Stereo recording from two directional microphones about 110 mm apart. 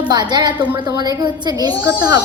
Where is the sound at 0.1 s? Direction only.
40° right (ahead or behind).